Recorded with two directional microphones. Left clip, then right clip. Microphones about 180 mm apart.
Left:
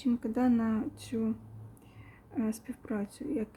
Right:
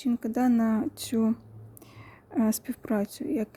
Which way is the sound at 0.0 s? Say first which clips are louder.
Right 3 dB; 30° right (ahead or behind).